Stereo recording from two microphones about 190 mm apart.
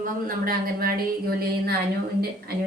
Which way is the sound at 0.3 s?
50° right (ahead or behind).